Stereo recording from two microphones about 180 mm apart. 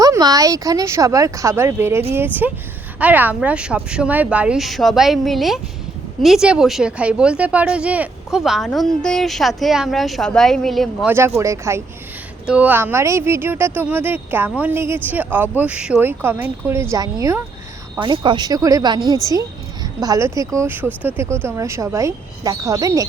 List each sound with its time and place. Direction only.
0.0 s speech: 20° right (ahead or behind); by 11.1 s centre (ahead or behind)
11.3 s speech: 15° right (ahead or behind)